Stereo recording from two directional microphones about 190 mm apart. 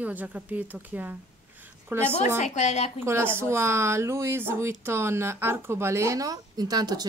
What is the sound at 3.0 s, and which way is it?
Speech, 15° right (ahead or behind).